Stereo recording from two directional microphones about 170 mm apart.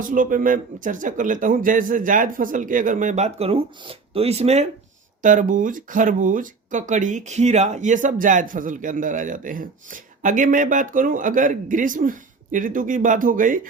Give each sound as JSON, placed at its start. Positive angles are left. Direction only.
{"t": 0.0, "sound": "speech", "side_deg": -55}